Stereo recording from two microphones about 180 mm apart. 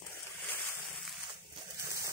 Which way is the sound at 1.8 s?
15° right (ahead or behind).